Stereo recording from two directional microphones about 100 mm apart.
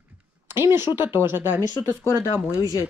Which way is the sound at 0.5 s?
25° right (ahead or behind).